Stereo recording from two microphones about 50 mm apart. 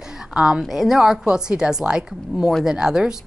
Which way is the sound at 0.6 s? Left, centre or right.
Centre.